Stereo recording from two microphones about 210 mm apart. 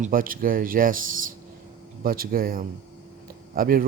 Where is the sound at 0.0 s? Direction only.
40° right (ahead or behind).